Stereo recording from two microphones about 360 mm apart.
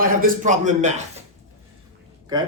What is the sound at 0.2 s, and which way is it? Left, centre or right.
Speech, right.